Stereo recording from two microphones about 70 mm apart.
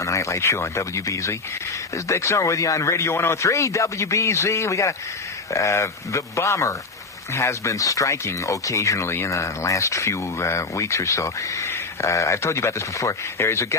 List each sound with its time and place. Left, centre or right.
0.0 s speech: left